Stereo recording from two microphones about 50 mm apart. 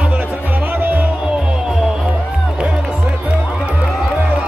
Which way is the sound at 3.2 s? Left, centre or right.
Right.